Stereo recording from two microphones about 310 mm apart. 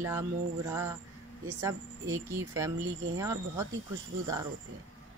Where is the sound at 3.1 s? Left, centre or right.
Centre.